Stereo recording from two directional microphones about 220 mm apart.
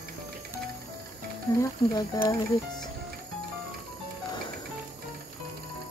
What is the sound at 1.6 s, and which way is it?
Speech, 15° left (ahead or behind).